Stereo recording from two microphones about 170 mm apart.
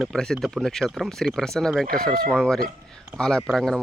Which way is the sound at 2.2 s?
5° left (ahead or behind).